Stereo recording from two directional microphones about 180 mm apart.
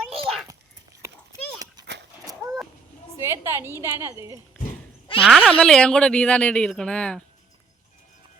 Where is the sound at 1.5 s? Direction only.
20° right (ahead or behind).